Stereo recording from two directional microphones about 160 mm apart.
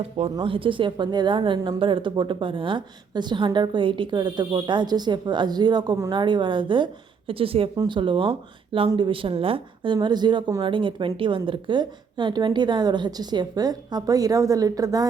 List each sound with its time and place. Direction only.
0.3 s speech: 35° right (ahead or behind)